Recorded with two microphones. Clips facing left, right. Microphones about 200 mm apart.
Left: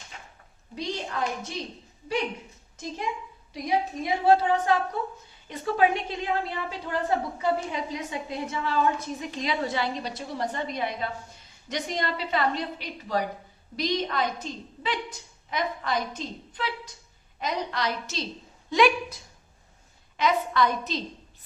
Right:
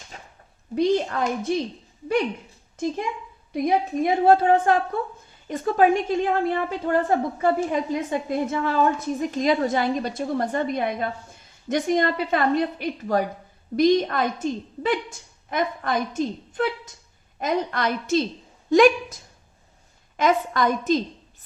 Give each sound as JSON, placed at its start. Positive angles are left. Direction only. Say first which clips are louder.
{"t": 0.1, "sound": "a sound", "louder": "right 3 dB", "side_deg": -40}
{"t": 0.8, "sound": "a woman's voice", "louder": "right 10 dB", "side_deg": -55}
{"t": 2.7, "sound": "a woman's voice", "louder": "right 6 dB", "side_deg": -55}